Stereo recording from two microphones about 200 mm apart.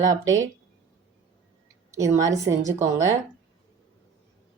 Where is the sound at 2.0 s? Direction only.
15° right (ahead or behind).